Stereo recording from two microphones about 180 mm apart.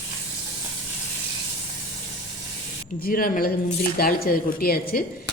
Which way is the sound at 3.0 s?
55° left (ahead or behind).